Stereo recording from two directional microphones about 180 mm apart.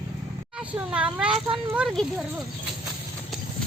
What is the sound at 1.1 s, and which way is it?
Speech, 5° right (ahead or behind).